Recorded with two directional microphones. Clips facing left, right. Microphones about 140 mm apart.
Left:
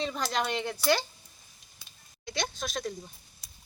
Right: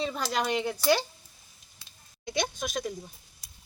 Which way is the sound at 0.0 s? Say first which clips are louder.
Right 1 dB; 5° right (ahead or behind).